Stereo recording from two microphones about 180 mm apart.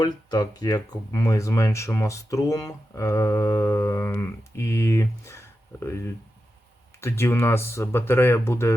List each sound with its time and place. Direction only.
0.0 s speech: 20° left (ahead or behind)